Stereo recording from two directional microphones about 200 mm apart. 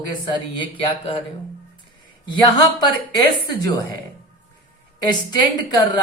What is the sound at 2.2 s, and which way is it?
Speech, 25° left (ahead or behind).